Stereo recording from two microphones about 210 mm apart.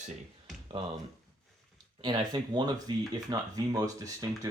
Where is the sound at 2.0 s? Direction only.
20° right (ahead or behind).